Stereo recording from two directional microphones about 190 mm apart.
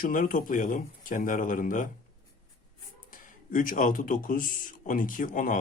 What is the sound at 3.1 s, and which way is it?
Speech, 45° left (ahead or behind).